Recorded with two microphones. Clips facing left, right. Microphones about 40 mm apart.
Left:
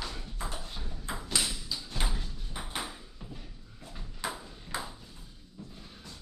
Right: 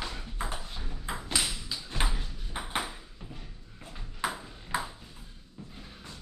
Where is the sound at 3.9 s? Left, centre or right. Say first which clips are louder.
Right 4 dB; right.